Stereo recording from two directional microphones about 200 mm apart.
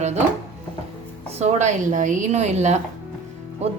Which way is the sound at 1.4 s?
35° right (ahead or behind).